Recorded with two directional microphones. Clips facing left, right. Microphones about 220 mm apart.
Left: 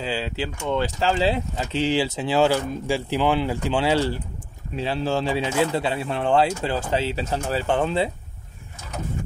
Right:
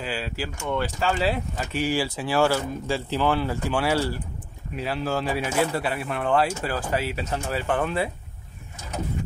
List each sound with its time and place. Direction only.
0.0 s speech: 25° left (ahead or behind)